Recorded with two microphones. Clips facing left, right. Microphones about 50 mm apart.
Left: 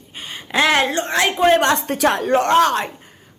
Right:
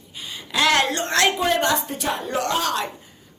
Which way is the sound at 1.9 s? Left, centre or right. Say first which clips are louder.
Left 8 dB; left.